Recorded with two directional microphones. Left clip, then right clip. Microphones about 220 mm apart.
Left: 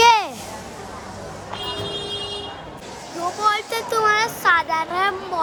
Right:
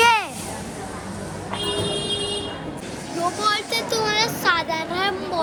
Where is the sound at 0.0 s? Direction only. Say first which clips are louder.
Left 3 dB; 40° left (ahead or behind).